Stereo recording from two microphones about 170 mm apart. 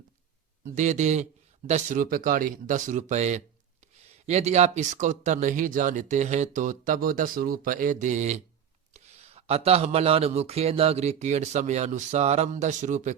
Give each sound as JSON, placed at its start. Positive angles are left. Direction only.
{"t": 0.6, "sound": "a man's voice", "side_deg": -45}